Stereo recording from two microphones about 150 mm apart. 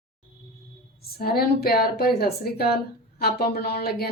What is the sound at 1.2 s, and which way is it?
Speech, 90° left.